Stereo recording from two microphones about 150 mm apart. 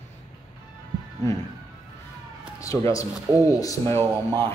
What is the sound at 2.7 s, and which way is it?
Speech, 10° left (ahead or behind).